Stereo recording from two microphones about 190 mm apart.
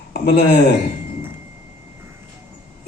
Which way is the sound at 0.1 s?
55° left (ahead or behind).